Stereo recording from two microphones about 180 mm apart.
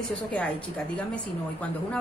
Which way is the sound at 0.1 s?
5° left (ahead or behind).